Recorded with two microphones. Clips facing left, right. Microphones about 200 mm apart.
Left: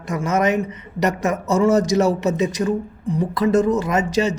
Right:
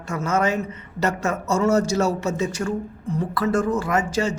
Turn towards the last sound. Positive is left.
turn(degrees=20)  # may be behind; listen again after turning